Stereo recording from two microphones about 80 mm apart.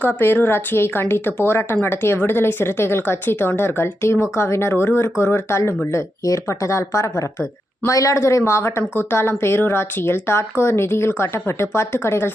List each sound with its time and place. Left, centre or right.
0.2 s a woman's voice: left